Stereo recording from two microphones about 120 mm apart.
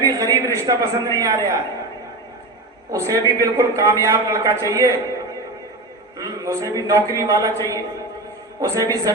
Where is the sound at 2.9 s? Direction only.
25° right (ahead or behind).